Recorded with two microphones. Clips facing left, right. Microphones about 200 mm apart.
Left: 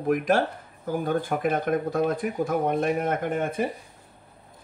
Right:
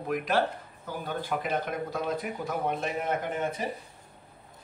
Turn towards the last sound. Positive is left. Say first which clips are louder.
# left 5 dB
turn(degrees=55)  # may be behind; listen again after turning